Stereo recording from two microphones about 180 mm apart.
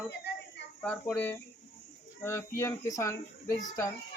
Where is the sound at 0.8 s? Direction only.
10° left (ahead or behind).